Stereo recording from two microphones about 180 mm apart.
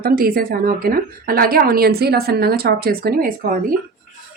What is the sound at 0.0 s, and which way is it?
A woman's voice, 55° right (ahead or behind).